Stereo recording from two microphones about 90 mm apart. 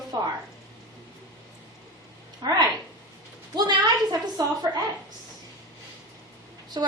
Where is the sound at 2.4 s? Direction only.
50° right (ahead or behind).